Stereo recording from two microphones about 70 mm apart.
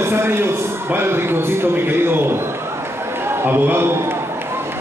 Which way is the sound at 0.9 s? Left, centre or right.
Right.